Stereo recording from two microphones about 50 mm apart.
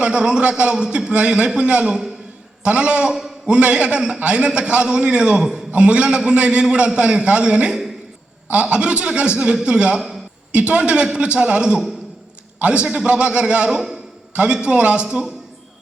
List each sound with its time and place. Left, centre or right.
0.0 s a man's voice: centre
2.6 s a man's voice: right
3.2 s a sound: centre
3.5 s a man's voice: right
13.7 s a man's voice: centre